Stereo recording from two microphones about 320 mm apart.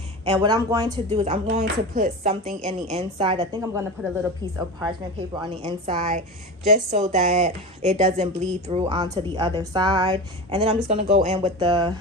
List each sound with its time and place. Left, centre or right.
0.2 s a woman's voice: centre